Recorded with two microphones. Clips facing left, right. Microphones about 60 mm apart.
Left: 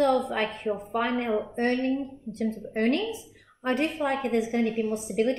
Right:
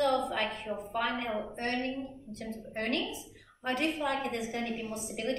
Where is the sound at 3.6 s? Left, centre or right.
Left.